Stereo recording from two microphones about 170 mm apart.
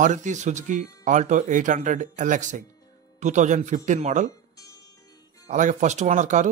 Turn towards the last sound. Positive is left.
turn(degrees=-45)  # may be behind; listen again after turning